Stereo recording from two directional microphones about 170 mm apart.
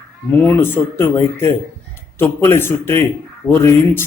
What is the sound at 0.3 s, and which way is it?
Speech, 10° left (ahead or behind).